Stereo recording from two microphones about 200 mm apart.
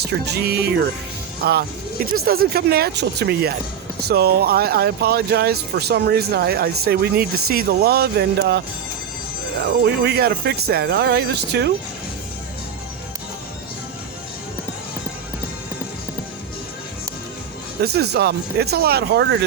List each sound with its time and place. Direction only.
0.0 s speech: 55° right (ahead or behind)
9.6 s speech: 55° right (ahead or behind)
17.8 s speech: 55° right (ahead or behind)